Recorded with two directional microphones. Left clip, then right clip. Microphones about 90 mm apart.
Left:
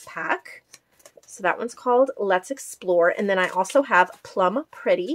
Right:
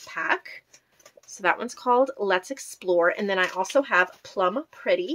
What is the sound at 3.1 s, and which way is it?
Speech, 15° left (ahead or behind).